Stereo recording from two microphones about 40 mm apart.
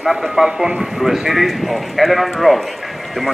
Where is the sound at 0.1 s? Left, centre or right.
Centre.